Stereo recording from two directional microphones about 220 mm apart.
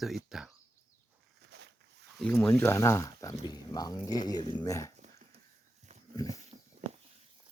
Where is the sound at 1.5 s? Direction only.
50° right (ahead or behind).